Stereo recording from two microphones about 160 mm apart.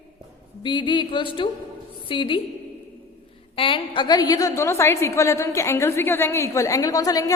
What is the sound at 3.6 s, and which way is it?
A woman's voice, 30° left (ahead or behind).